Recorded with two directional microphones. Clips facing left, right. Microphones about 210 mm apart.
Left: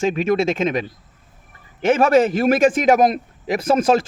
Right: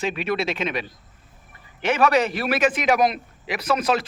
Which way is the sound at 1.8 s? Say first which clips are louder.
Left 5 dB; 45° left (ahead or behind).